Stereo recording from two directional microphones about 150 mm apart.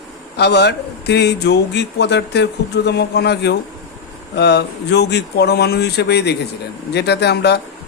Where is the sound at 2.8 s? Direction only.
90° left.